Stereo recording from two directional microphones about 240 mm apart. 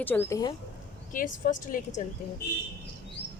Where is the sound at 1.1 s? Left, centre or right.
Left.